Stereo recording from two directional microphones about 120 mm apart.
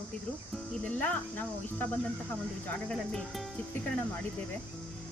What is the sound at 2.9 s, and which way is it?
Speech, 5° left (ahead or behind).